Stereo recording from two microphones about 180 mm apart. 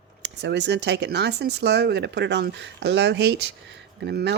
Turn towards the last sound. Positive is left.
turn(degrees=-70)  # may be behind; listen again after turning